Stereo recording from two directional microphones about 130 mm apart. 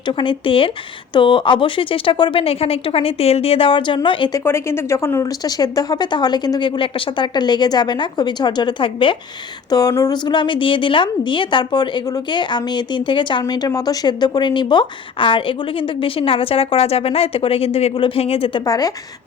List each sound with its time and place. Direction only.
0.0 s a woman's voice: 40° left (ahead or behind)
4.3 s a woman's voice: 20° left (ahead or behind); by 9.1 s 40° left (ahead or behind)
9.6 s a woman's voice: 30° left (ahead or behind); by 18.6 s 45° left (ahead or behind)
18.6 s a woman's voice: 30° left (ahead or behind)